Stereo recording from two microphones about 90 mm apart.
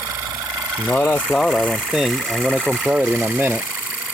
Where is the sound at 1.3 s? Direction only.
5° left (ahead or behind).